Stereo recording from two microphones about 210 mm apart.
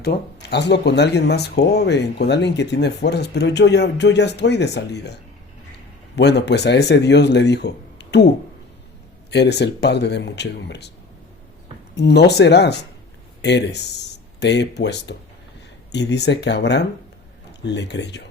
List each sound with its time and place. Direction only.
0.0 s speech: 50° left (ahead or behind)
9.3 s speech: 55° left (ahead or behind)
11.9 s speech: 55° left (ahead or behind)